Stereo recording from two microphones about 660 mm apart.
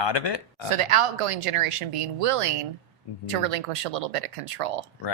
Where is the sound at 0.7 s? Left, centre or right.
Right.